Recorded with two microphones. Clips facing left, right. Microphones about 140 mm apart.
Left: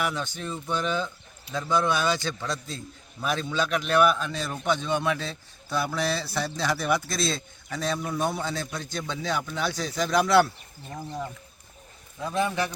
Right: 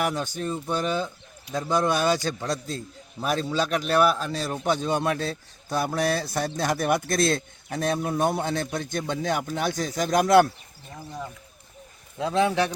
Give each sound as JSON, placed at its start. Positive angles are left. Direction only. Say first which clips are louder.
{"t": 0.0, "sound": "a man's voice", "louder": "right 3 dB", "side_deg": -45}
{"t": 10.8, "sound": "speech", "louder": "left 2 dB", "side_deg": 0}
{"t": 12.2, "sound": "a man's voice", "louder": "right 4 dB", "side_deg": -90}